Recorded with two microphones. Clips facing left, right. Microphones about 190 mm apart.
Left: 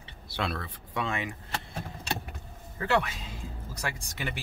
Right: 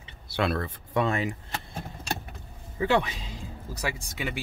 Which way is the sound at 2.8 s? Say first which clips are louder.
Right 4 dB; 15° right (ahead or behind).